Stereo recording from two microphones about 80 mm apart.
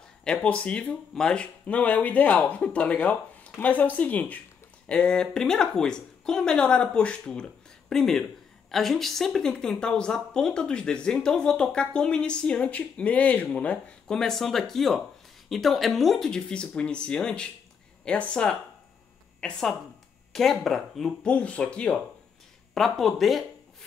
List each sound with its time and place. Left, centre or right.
0.2 s speech: centre
21.3 s speech: centre
22.8 s speech: centre